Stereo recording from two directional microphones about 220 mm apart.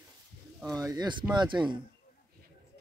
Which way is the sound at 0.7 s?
20° right (ahead or behind).